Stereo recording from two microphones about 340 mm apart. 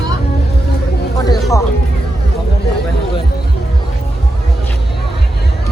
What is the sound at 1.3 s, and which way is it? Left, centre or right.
Speech, centre.